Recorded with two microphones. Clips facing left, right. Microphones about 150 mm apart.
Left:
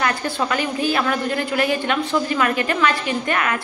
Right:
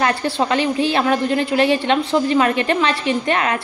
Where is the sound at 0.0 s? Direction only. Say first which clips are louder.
Right 3 dB; 30° right (ahead or behind).